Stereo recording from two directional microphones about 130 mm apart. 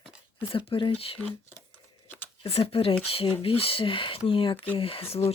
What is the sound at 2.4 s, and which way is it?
Speech, 50° left (ahead or behind).